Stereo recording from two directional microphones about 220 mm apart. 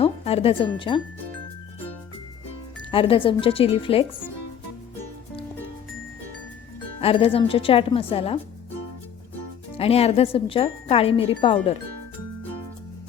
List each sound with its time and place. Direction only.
0.0 s speech: 25° left (ahead or behind)
2.9 s speech: 25° left (ahead or behind)
7.0 s speech: 25° left (ahead or behind)
9.7 s speech: 25° left (ahead or behind)